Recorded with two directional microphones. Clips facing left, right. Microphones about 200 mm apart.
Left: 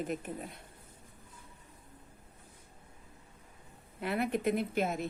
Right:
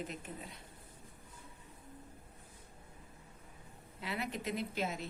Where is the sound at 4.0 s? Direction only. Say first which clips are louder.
Left 8 dB; 55° left (ahead or behind).